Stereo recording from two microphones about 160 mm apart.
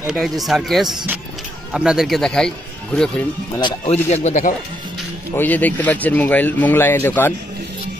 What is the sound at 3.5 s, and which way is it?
Speech, 30° left (ahead or behind).